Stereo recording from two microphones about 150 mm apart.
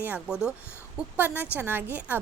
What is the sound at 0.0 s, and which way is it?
A woman's voice, 10° right (ahead or behind).